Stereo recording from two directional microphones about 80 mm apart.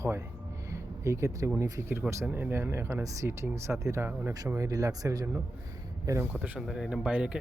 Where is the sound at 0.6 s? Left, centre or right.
Right.